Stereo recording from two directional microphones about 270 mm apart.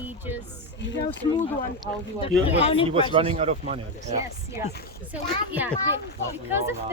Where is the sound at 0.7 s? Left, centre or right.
Left.